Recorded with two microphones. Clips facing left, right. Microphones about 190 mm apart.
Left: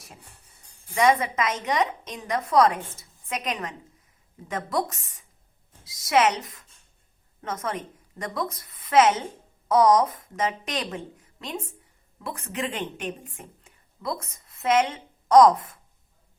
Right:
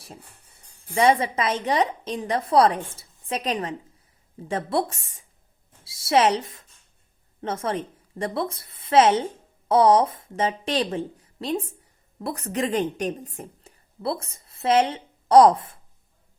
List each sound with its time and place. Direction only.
0.9 s a woman's voice: 30° right (ahead or behind)